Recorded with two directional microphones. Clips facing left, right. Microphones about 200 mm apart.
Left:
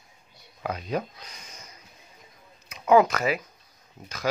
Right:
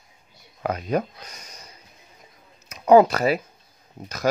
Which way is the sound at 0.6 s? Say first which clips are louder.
Right 5 dB; 50° right (ahead or behind).